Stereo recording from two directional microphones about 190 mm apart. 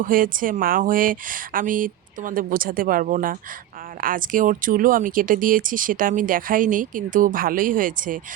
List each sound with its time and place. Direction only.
0.0 s speech: 45° right (ahead or behind)